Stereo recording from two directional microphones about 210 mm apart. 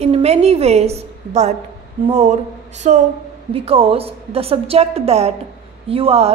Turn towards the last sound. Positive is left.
turn(degrees=-30)  # may be behind; listen again after turning